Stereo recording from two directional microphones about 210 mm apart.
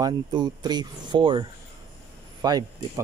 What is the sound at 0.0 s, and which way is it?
Speech, 20° right (ahead or behind).